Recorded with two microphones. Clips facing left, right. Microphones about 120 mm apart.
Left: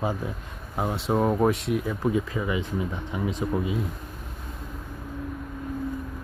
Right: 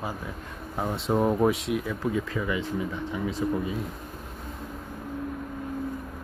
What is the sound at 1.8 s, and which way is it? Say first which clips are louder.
Speech: left 3 dB; 15° left (ahead or behind).